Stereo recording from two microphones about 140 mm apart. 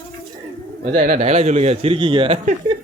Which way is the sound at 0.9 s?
60° right (ahead or behind).